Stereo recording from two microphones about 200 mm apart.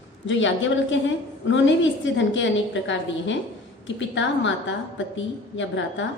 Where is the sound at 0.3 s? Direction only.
70° left (ahead or behind).